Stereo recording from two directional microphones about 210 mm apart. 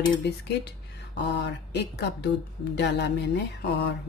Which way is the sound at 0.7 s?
55° left (ahead or behind).